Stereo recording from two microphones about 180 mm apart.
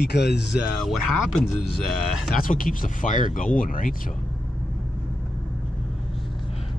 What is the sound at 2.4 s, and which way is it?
Speech, 50° left (ahead or behind).